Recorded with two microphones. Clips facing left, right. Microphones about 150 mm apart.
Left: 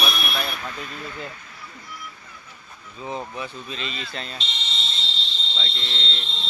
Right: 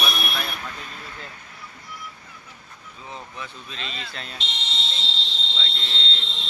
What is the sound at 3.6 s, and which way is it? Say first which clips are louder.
Speech: left 3 dB; 5° left (ahead or behind).